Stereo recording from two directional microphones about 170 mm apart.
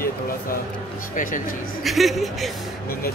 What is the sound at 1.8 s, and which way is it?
Speech, centre (ahead or behind).